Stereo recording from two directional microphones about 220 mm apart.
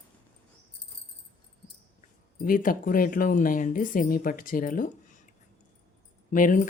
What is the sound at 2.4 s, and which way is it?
Speech, 40° left (ahead or behind).